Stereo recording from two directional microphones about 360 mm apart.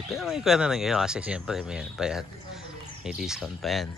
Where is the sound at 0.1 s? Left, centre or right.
Centre.